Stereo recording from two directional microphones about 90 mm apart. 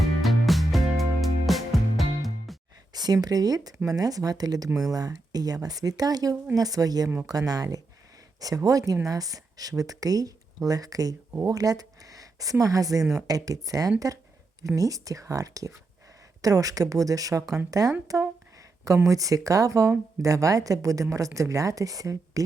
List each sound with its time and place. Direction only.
0.0 s music: centre (ahead or behind)
2.9 s a woman's voice: 45° right (ahead or behind)
19.0 s a woman's voice: 40° right (ahead or behind)